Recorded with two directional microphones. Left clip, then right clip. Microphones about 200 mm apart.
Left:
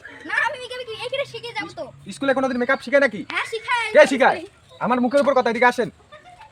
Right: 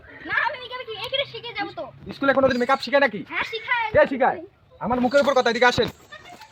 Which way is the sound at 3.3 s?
20° left (ahead or behind).